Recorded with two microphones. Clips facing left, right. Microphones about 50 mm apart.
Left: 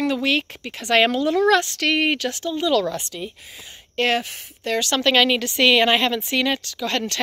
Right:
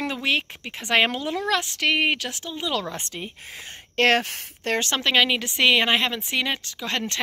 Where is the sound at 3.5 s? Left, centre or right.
Right.